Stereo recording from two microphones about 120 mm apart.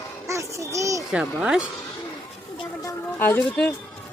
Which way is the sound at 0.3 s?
25° right (ahead or behind).